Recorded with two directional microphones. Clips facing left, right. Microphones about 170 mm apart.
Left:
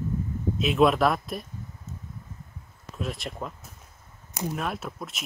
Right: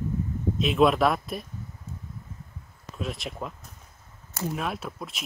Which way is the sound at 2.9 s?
Centre (ahead or behind).